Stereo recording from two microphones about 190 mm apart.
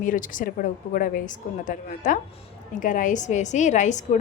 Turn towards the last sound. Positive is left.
turn(degrees=40)  # may be behind; listen again after turning